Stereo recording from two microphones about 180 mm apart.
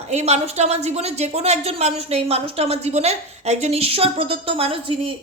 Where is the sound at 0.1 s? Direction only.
35° right (ahead or behind).